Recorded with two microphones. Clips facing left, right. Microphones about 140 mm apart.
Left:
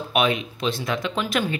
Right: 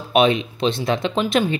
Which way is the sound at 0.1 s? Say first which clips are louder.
Right 6 dB; 25° right (ahead or behind).